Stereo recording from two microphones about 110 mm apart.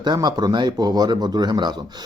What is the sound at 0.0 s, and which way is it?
Speech, 40° right (ahead or behind).